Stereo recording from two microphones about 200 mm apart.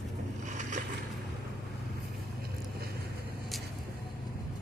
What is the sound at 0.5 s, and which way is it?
Boat, 40° right (ahead or behind).